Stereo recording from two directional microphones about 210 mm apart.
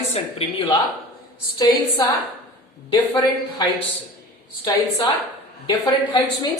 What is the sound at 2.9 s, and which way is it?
Speech, 15° left (ahead or behind).